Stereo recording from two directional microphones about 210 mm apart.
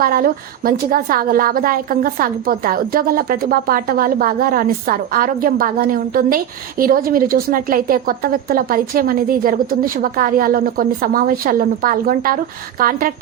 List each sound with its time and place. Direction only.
0.0 s a woman's voice: 45° right (ahead or behind)